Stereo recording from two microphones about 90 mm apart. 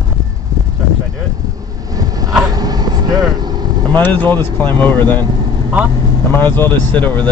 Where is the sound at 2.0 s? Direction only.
45° right (ahead or behind).